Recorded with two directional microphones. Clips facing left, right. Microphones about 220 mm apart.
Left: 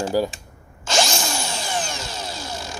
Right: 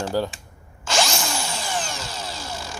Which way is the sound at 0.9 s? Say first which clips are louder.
Left 1 dB; 20° left (ahead or behind).